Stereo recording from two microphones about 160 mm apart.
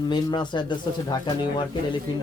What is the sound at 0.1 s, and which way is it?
Speech, 30° left (ahead or behind).